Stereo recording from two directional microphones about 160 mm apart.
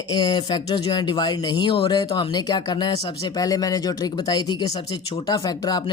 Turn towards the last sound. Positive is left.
turn(degrees=25)  # may be behind; listen again after turning